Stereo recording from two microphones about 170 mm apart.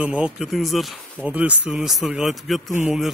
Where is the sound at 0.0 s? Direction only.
5° right (ahead or behind).